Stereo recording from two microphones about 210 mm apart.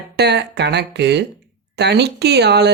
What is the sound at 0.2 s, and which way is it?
Speech, 55° right (ahead or behind).